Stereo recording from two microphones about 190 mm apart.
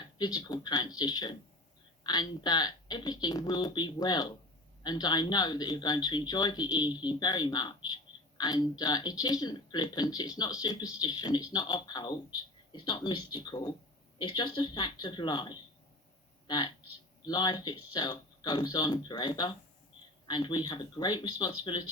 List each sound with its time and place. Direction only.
0.2 s speech: 20° left (ahead or behind)
17.2 s speech: 20° left (ahead or behind)